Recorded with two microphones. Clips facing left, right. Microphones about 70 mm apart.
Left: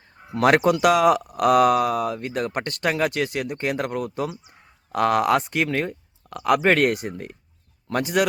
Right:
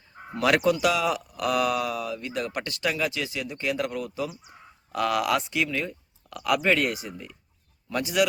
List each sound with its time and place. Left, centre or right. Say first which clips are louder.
0.3 s speech: left 4 dB; left
6.3 s speech: left 5 dB; left